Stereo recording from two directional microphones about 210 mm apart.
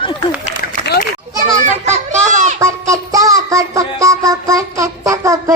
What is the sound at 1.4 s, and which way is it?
Children playing, 35° right (ahead or behind).